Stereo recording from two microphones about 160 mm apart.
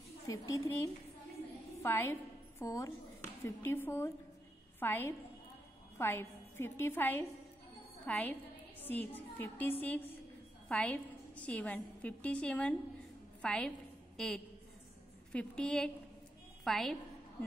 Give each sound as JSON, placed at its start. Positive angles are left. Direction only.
{"t": 0.3, "sound": "a woman's voice", "side_deg": 20}